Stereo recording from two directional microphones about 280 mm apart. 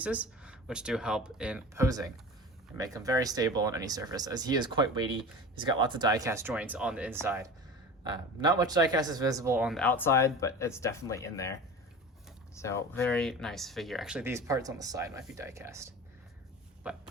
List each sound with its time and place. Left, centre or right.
0.0 s speech: centre
12.5 s speech: centre